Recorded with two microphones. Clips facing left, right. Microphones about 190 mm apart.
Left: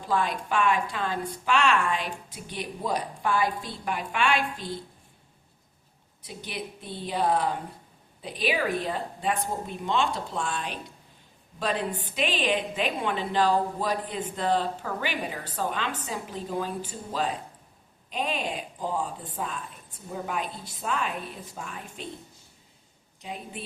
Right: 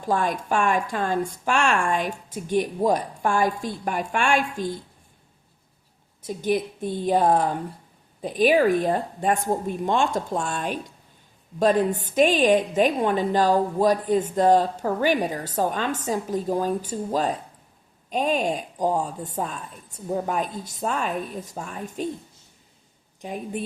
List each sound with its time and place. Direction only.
0.0 s a woman's voice: 45° right (ahead or behind)
6.2 s a woman's voice: 45° right (ahead or behind)
23.2 s a woman's voice: 50° right (ahead or behind)